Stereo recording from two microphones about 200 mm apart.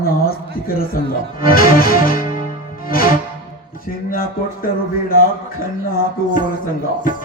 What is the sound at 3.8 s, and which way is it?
Speech, 45° left (ahead or behind).